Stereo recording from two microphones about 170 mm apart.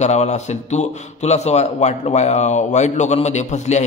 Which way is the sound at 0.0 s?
40° left (ahead or behind).